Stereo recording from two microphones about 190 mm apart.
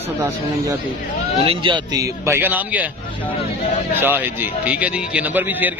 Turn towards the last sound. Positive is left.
turn(degrees=-10)  # may be behind; listen again after turning